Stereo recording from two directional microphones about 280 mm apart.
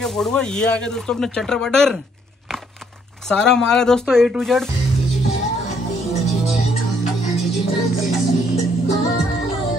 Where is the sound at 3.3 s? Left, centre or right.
Centre.